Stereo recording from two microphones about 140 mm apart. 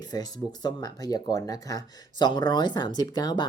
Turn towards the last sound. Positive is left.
turn(degrees=30)  # may be behind; listen again after turning